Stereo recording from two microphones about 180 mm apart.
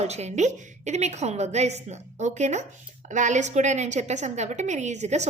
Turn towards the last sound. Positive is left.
turn(degrees=-40)  # may be behind; listen again after turning